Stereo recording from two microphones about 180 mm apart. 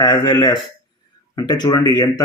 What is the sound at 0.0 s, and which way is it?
Speech, 25° left (ahead or behind).